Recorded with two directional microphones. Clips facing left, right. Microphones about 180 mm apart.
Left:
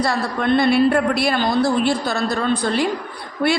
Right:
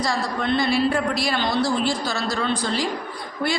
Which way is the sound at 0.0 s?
60° left (ahead or behind).